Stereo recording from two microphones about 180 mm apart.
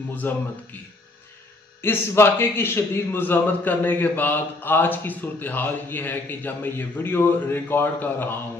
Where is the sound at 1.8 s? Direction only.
10° left (ahead or behind).